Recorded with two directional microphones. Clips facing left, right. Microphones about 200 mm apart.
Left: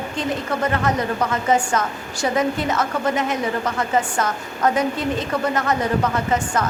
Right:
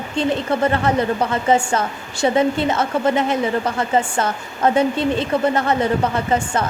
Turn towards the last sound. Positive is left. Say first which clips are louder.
# right 3 dB
turn(degrees=-30)  # may be behind; listen again after turning